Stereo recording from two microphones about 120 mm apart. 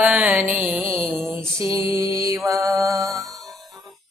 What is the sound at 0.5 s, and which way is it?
Music, 10° right (ahead or behind).